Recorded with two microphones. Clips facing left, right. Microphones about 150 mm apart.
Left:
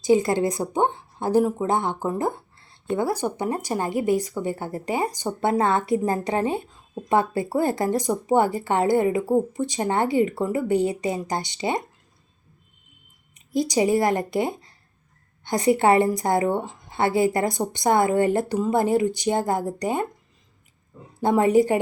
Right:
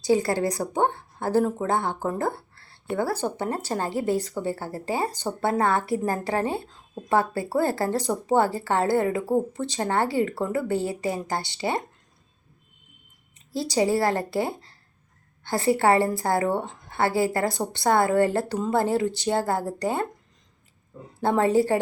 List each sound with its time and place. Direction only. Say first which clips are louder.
0.0 s a woman's voice: left 3 dB; 20° left (ahead or behind)
13.3 s a woman's voice: left 3 dB; 15° left (ahead or behind)
21.2 s speech: left 3 dB; 15° left (ahead or behind)